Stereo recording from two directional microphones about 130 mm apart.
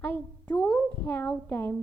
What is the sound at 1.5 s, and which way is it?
Speech, 15° left (ahead or behind).